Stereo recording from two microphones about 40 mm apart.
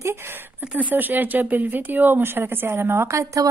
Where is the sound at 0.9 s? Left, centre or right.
Right.